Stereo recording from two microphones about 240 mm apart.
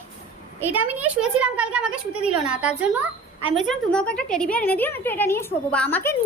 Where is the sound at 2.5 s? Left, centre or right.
Centre.